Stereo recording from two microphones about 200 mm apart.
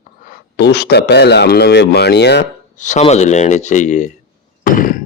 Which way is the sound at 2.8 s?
35° left (ahead or behind).